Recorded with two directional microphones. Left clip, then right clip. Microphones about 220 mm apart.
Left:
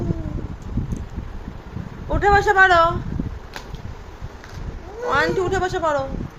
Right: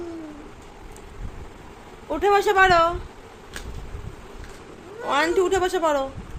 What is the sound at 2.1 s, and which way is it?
Speech, 5° right (ahead or behind).